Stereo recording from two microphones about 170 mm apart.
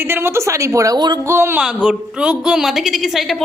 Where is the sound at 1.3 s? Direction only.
15° right (ahead or behind).